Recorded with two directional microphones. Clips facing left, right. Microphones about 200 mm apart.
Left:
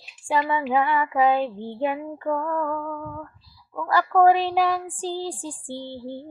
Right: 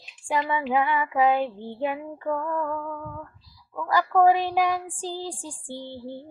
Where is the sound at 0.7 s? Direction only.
15° right (ahead or behind).